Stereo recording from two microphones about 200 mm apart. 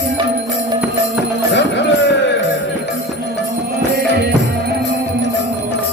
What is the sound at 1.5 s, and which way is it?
Music, 60° left (ahead or behind).